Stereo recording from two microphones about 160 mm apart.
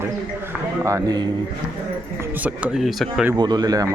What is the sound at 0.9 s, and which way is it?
Speech, 20° right (ahead or behind).